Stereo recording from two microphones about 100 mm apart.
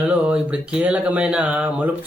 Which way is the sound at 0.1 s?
10° right (ahead or behind).